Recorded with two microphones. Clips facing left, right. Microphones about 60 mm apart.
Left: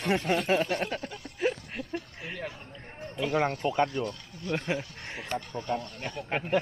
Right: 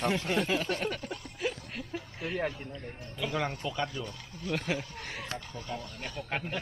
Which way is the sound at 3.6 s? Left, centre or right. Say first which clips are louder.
Left 7 dB; left.